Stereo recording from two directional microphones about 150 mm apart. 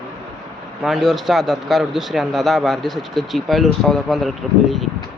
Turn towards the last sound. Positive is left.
turn(degrees=0)  # may be behind; listen again after turning